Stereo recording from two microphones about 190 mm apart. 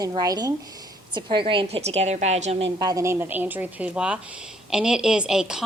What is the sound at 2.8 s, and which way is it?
A woman's voice, 20° right (ahead or behind).